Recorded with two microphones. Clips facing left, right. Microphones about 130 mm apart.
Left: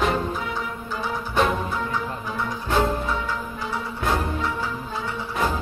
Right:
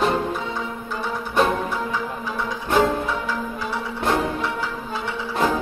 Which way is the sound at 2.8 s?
90° right.